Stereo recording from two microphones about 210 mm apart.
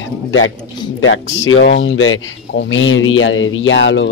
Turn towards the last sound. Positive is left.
turn(degrees=60)  # may be behind; listen again after turning